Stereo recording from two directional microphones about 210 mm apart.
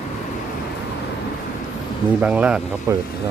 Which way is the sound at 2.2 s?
5° right (ahead or behind).